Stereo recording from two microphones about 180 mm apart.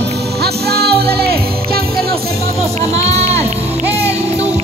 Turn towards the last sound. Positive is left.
turn(degrees=-35)  # may be behind; listen again after turning